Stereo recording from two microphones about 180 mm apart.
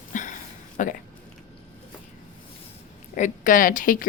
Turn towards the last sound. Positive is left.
turn(degrees=50)  # may be behind; listen again after turning